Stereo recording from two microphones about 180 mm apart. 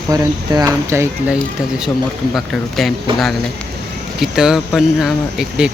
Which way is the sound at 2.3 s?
Centre (ahead or behind).